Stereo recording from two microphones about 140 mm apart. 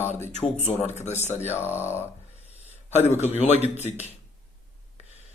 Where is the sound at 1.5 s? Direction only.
15° left (ahead or behind).